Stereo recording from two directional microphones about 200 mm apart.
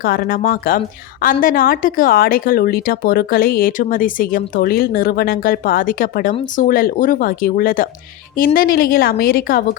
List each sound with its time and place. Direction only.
0.0 s speech: 45° left (ahead or behind)